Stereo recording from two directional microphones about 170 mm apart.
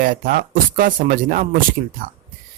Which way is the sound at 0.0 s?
55° right (ahead or behind).